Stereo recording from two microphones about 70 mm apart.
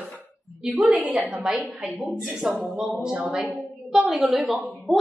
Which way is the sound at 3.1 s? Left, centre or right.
Centre.